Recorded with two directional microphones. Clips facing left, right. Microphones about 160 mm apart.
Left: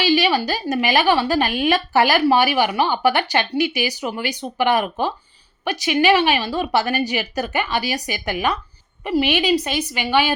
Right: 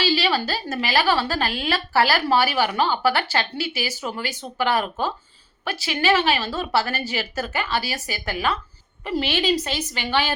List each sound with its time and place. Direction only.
0.0 s speech: 15° left (ahead or behind)